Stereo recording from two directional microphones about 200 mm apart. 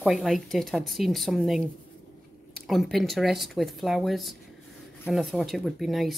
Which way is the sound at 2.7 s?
Centre (ahead or behind).